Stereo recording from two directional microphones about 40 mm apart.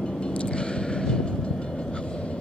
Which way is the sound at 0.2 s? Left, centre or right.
Left.